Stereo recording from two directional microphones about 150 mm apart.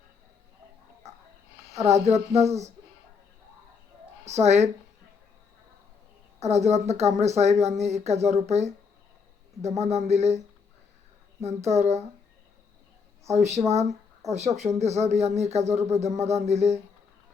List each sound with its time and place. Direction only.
1.0 s a sound: 50° right (ahead or behind)
1.8 s speech: 50° right (ahead or behind)
4.3 s speech: 50° right (ahead or behind)
6.4 s speech: 45° right (ahead or behind)
11.4 s speech: 50° right (ahead or behind)
13.3 s speech: 50° right (ahead or behind)